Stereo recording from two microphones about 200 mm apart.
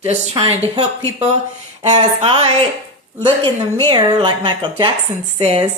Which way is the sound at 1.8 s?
35° right (ahead or behind).